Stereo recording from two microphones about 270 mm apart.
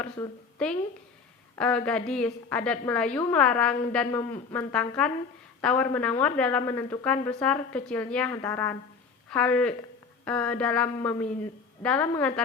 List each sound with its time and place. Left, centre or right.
0.0 s a woman's voice: centre